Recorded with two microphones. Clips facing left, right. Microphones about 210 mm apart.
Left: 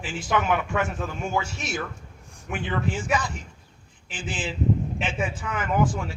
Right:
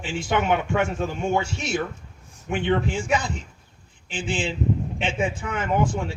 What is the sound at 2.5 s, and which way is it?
Speech, 30° right (ahead or behind).